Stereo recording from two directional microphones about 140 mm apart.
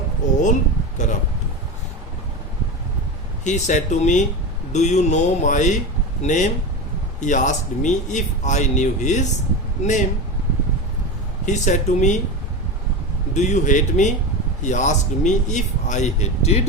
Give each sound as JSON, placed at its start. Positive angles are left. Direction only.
{"t": 0.2, "sound": "a sound", "side_deg": 60}
{"t": 3.4, "sound": "speech", "side_deg": 60}
{"t": 11.4, "sound": "speech", "side_deg": 60}
{"t": 13.3, "sound": "speech", "side_deg": 60}